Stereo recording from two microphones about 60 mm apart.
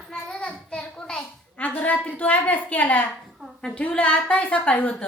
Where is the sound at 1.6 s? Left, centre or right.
Left.